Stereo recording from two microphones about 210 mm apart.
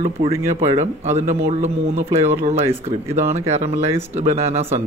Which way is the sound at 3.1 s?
30° right (ahead or behind).